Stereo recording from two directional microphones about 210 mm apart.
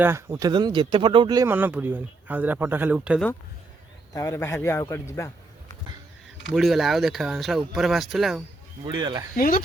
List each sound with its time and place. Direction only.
0.0 s speech: 10° right (ahead or behind)
4.1 s a man's voice: 15° left (ahead or behind)
6.5 s speech: centre (ahead or behind)
9.0 s speech: 20° right (ahead or behind)
9.3 s speech: 40° left (ahead or behind)